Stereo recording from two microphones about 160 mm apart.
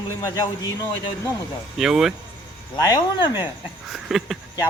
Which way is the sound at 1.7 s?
Centre (ahead or behind).